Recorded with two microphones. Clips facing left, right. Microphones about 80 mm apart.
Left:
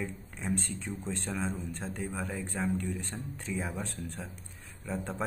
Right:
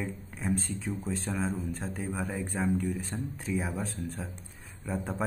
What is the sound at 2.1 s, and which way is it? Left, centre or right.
Speech, centre.